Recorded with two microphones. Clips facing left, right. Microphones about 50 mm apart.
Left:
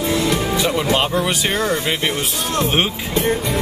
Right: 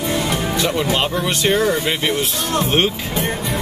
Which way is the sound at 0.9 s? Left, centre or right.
Centre.